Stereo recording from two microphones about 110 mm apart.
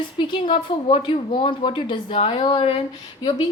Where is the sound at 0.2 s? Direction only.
50° left (ahead or behind).